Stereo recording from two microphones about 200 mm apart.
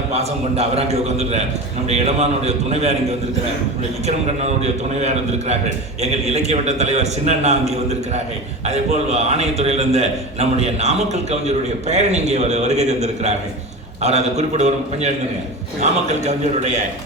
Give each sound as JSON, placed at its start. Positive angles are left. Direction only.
{"t": 0.1, "sound": "a man's voice", "side_deg": -30}
{"t": 4.0, "sound": "a man's voice", "side_deg": -35}
{"t": 8.6, "sound": "a man's voice", "side_deg": -35}